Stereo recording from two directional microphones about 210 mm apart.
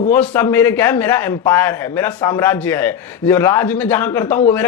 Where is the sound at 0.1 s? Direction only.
10° left (ahead or behind).